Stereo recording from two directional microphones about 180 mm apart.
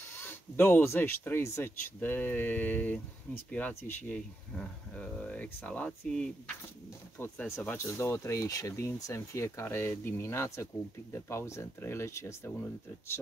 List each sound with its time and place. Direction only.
0.1 s speech: 10° left (ahead or behind)